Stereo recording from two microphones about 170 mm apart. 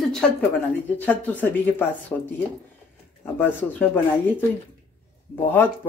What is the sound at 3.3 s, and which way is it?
Speech, 10° left (ahead or behind).